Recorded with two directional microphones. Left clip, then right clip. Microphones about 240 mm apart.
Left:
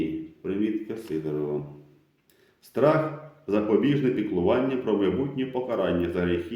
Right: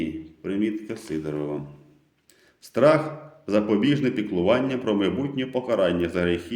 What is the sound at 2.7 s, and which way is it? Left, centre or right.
A man's voice, right.